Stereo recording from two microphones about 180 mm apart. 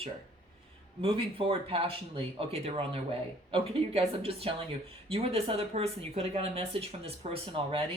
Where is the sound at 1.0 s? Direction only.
30° right (ahead or behind).